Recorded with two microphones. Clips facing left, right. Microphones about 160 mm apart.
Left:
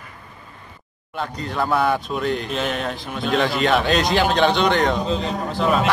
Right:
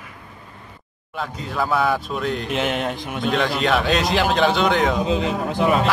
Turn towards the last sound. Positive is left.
turn(degrees=-15)  # may be behind; listen again after turning